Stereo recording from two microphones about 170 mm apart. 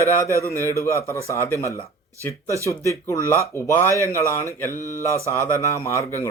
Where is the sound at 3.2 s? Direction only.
15° right (ahead or behind).